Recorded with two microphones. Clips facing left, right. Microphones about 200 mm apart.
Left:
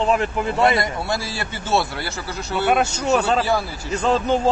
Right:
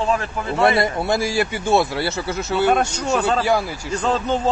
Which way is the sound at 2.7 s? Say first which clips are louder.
Left 1 dB; 10° left (ahead or behind).